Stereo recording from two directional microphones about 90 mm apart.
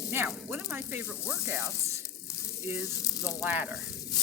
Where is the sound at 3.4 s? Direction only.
25° right (ahead or behind).